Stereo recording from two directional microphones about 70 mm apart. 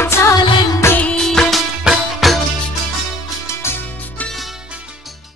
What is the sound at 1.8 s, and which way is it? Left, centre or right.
Music, centre.